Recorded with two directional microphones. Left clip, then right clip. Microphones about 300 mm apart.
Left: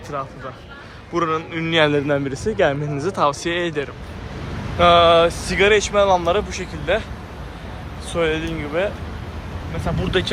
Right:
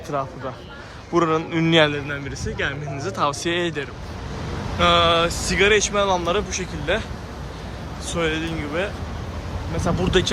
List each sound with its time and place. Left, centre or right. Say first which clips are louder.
1.1 s speech: right 1 dB; centre
1.9 s speech: left 8 dB; centre
8.1 s speech: left 3 dB; centre